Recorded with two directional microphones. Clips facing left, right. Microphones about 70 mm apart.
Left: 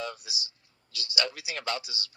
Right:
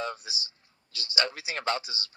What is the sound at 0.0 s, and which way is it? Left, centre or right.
Speech, right.